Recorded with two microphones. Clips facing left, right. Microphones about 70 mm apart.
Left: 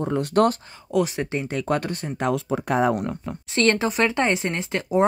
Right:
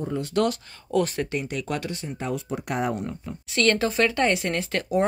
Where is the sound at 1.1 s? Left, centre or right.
Left.